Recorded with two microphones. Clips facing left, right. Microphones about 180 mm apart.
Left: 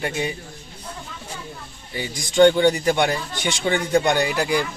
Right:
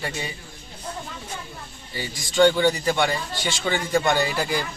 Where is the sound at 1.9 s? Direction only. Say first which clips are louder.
Left 3 dB; 20° left (ahead or behind).